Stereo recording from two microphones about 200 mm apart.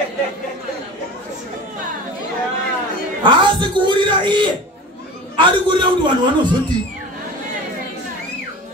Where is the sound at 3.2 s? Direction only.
25° right (ahead or behind).